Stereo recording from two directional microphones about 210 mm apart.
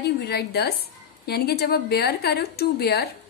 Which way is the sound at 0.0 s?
50° left (ahead or behind).